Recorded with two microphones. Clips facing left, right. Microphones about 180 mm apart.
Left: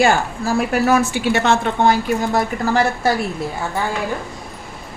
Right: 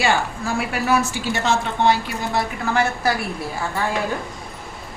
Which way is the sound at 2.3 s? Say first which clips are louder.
Even; 35° left (ahead or behind).